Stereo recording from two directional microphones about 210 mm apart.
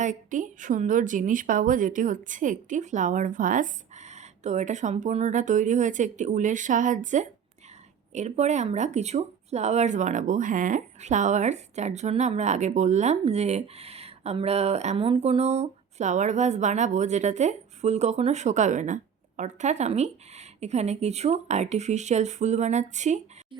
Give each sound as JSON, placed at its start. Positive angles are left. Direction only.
{"t": 0.0, "sound": "speech", "side_deg": -35}